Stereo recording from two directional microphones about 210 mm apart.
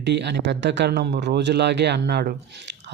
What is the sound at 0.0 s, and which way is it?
A man's voice, 55° right (ahead or behind).